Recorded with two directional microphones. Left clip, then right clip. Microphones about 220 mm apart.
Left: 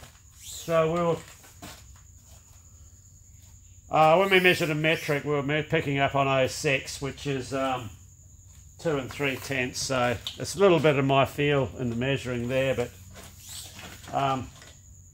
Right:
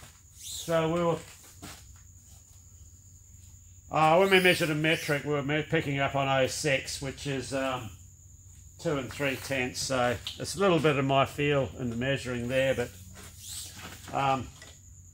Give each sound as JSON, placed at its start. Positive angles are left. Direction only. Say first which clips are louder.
{"t": 0.7, "sound": "speech", "louder": "left 3 dB", "side_deg": 30}
{"t": 3.9, "sound": "speech", "louder": "left 2 dB", "side_deg": 30}
{"t": 8.8, "sound": "speech", "louder": "left 2 dB", "side_deg": 30}